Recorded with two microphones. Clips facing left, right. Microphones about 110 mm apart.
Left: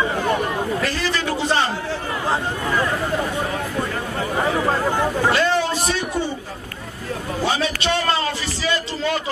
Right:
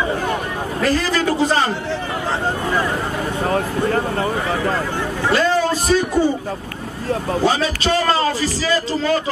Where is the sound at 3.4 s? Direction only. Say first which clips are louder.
Right 5 dB; 45° right (ahead or behind).